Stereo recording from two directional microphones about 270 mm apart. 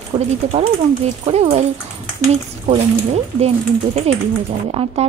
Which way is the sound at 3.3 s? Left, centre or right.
Right.